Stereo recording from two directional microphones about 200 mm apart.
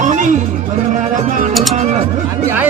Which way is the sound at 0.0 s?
40° right (ahead or behind).